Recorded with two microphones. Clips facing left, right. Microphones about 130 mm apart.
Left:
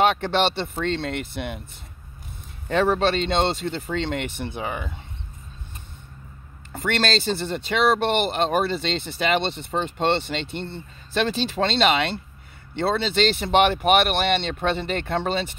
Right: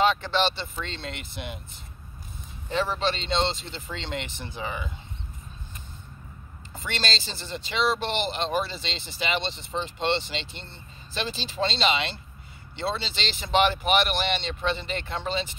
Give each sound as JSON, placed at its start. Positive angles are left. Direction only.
{"t": 0.0, "sound": "speech", "side_deg": 60}
{"t": 2.7, "sound": "speech", "side_deg": 55}
{"t": 6.7, "sound": "speech", "side_deg": 60}